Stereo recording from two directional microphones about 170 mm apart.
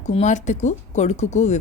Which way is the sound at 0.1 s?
45° left (ahead or behind).